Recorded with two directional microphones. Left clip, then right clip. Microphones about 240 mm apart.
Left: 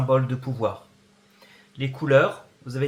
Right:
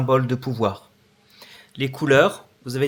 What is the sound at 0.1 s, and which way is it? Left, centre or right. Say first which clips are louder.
Speech: right 3 dB; right.